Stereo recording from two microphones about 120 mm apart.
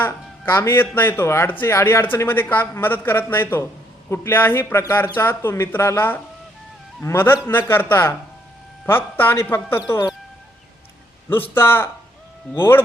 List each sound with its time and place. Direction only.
0.0 s speech: 20° left (ahead or behind)
11.5 s speech: 20° left (ahead or behind)